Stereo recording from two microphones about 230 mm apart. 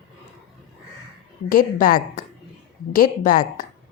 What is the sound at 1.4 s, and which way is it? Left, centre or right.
Speech, left.